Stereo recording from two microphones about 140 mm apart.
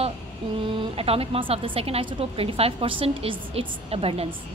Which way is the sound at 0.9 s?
45° right (ahead or behind).